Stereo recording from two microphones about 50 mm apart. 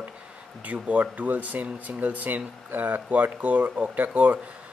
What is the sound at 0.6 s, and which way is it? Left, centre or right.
Speech, right.